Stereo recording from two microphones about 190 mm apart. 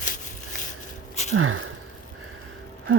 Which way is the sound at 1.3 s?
90° right.